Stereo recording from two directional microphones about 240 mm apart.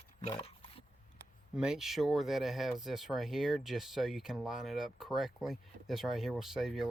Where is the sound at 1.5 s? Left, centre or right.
Centre.